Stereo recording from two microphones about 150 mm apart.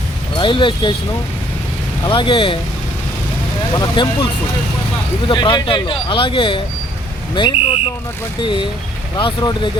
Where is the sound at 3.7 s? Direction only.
30° left (ahead or behind).